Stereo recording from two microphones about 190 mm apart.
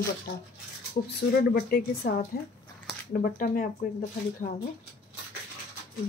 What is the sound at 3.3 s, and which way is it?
Speech, 45° left (ahead or behind).